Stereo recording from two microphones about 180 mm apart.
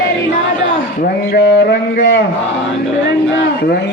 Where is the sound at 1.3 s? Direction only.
65° left (ahead or behind).